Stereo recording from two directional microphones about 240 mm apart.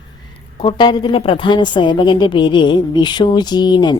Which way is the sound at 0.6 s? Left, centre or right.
Left.